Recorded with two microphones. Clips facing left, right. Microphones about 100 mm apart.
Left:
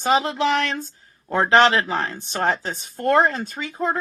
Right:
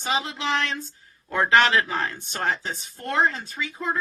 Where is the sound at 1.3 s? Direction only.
30° left (ahead or behind).